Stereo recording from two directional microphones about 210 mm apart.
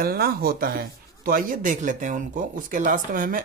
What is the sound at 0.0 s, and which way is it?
Speech, 45° right (ahead or behind).